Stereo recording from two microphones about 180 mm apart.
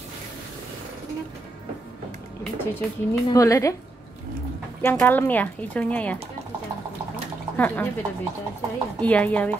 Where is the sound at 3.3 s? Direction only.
20° left (ahead or behind).